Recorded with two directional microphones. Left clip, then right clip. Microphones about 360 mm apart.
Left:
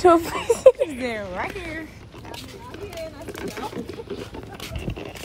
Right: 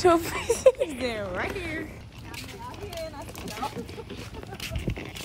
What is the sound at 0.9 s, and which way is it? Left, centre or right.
Speech, centre.